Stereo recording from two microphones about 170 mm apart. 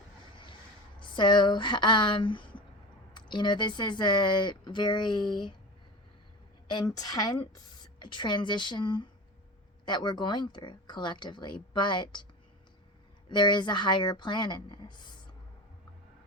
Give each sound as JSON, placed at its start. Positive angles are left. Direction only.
{"t": 0.9, "sound": "speech", "side_deg": 30}
{"t": 6.7, "sound": "speech", "side_deg": 25}
{"t": 13.3, "sound": "speech", "side_deg": 25}